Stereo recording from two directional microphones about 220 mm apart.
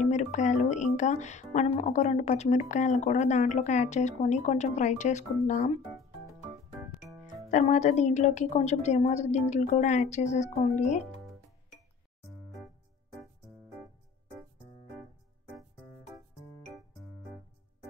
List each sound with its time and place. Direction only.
0.0 s speech: 35° left (ahead or behind)
7.4 s speech: 35° left (ahead or behind)